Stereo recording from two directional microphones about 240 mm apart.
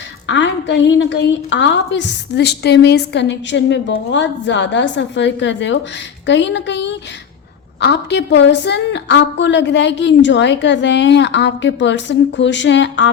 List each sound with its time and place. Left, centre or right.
0.3 s a woman's voice: left